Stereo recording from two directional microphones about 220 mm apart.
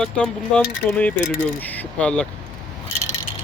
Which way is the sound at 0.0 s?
5° left (ahead or behind).